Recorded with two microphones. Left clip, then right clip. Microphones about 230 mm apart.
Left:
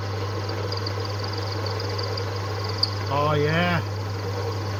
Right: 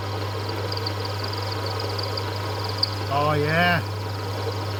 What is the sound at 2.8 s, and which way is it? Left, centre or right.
Cricket, right.